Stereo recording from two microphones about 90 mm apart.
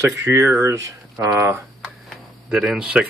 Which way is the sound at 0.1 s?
30° right (ahead or behind).